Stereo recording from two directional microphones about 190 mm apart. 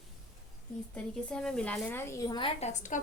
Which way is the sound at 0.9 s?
5° left (ahead or behind).